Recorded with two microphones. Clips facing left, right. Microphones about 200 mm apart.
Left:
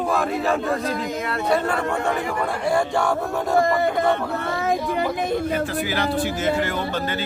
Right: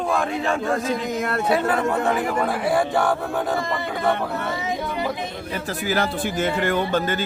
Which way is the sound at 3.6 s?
50° left (ahead or behind).